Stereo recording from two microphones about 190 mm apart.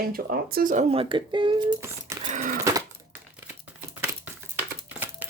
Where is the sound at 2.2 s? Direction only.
40° right (ahead or behind).